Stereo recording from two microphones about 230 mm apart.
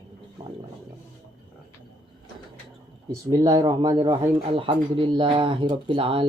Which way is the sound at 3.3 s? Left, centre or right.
Centre.